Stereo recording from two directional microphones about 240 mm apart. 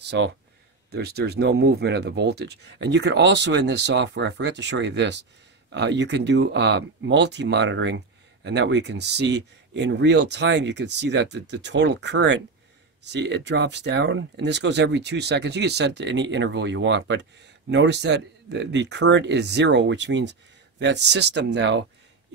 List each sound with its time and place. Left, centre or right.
0.0 s speech: right